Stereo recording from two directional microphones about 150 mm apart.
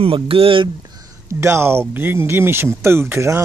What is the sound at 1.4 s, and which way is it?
Speech, 15° right (ahead or behind).